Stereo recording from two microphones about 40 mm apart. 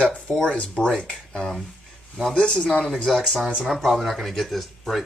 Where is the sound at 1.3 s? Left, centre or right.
Centre.